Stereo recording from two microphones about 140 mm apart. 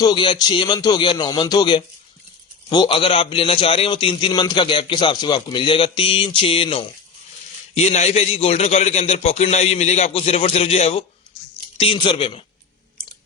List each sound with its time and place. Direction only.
0.0 s a man's voice: 35° left (ahead or behind)